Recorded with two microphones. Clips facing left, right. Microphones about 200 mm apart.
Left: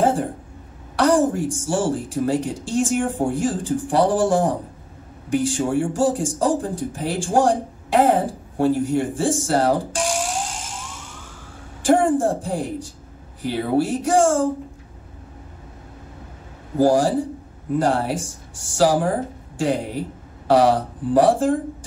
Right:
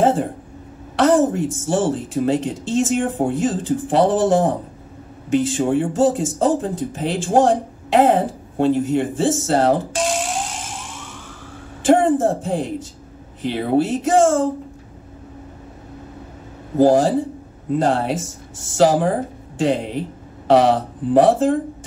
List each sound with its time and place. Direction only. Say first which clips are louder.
0.0 s a sound: right 2 dB; 20° right (ahead or behind)
0.9 s speech: right 2 dB; 20° right (ahead or behind)
11.8 s a woman's voice: right 2 dB; 20° right (ahead or behind)
16.7 s speech: right 3 dB; 20° right (ahead or behind)